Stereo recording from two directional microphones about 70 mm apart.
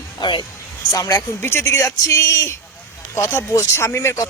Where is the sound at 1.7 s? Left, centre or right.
Left.